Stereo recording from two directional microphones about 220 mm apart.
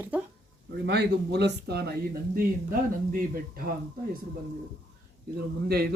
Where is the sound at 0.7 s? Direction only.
50° right (ahead or behind).